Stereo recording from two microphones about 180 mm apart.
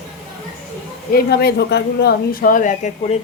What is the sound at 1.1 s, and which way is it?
Speech, 65° left (ahead or behind).